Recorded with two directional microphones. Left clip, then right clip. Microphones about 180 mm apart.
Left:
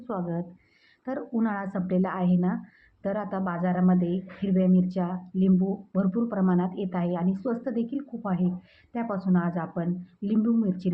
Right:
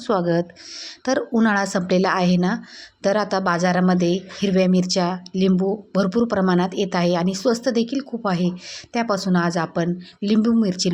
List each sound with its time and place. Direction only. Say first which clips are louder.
0.1 s a woman's voice: right 13 dB; 45° right (ahead or behind)